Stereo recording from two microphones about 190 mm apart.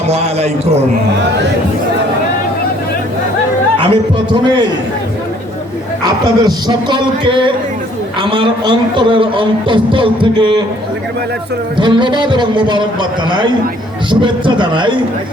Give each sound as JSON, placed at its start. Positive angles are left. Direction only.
{"t": 0.1, "sound": "a man's voice", "side_deg": -35}
{"t": 3.8, "sound": "a man's voice", "side_deg": -25}
{"t": 6.1, "sound": "a man's voice", "side_deg": -20}
{"t": 11.8, "sound": "a man's voice", "side_deg": -25}